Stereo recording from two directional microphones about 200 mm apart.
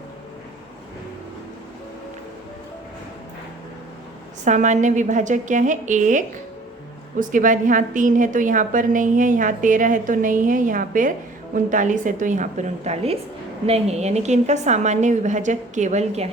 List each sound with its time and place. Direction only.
4.4 s a woman's voice: 40° right (ahead or behind)